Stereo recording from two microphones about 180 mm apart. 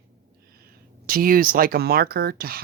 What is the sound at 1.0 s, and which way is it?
Speech, 50° right (ahead or behind).